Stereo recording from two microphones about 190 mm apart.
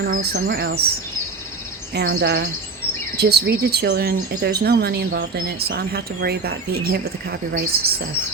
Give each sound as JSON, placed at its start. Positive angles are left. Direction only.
{"t": 0.1, "sound": "speech", "side_deg": -55}
{"t": 1.9, "sound": "speech", "side_deg": -60}